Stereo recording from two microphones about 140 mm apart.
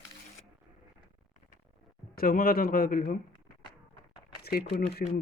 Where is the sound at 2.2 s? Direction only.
90° left.